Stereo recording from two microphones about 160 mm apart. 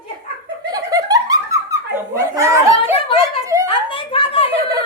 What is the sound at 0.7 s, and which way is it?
Laughter, 25° right (ahead or behind).